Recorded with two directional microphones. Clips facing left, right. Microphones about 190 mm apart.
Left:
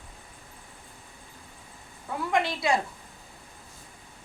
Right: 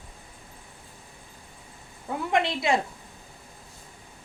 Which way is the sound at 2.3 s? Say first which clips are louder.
Right 1 dB; 20° right (ahead or behind).